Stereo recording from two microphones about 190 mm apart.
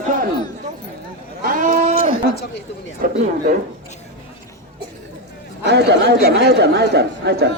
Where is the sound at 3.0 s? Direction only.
50° right (ahead or behind).